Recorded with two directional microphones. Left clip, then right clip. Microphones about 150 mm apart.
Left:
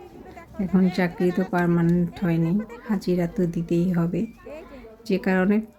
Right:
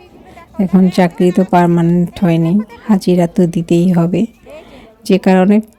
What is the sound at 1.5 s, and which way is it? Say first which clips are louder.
A woman's voice: right 12 dB; 50° right (ahead or behind).